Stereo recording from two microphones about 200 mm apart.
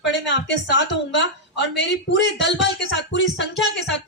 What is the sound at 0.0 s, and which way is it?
A woman's voice, 60° left (ahead or behind).